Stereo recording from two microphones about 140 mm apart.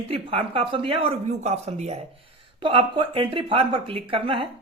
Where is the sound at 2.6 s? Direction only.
35° right (ahead or behind).